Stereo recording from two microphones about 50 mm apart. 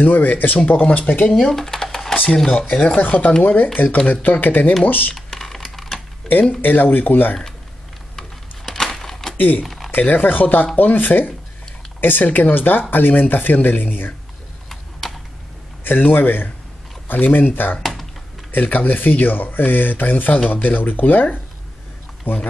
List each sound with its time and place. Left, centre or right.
0.0 s speech: left
1.3 s speech: centre
3.0 s speech: left
5.1 s computer keyboard: centre
6.6 s speech: left
8.6 s a sound: centre
9.4 s speech: left
14.7 s computer keyboard: centre
15.8 s speech: left
18.5 s speech: left